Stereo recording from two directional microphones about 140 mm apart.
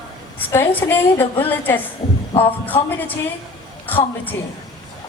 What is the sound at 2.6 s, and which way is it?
Speech, 15° left (ahead or behind).